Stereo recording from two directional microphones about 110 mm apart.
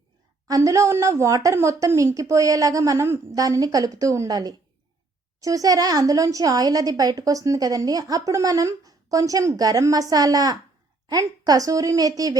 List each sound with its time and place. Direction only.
0.4 s a woman's voice: 30° right (ahead or behind)